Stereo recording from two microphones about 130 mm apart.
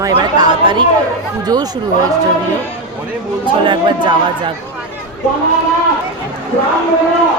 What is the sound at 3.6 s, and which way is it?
Speech, 40° right (ahead or behind).